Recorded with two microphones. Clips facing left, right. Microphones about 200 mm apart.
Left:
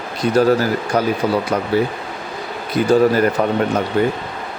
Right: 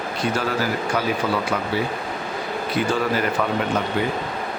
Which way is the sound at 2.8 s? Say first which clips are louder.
Left 5 dB; 40° left (ahead or behind).